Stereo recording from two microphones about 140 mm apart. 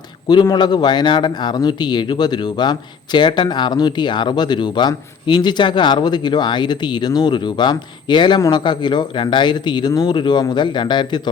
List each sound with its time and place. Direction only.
0.5 s speech: 30° left (ahead or behind)